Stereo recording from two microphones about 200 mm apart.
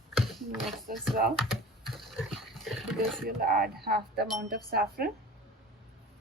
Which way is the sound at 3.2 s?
50° right (ahead or behind).